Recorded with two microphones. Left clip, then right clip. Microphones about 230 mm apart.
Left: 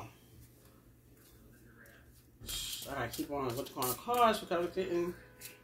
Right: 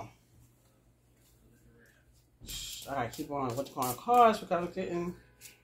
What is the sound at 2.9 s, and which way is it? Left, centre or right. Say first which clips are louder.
Speech: right 4 dB; right.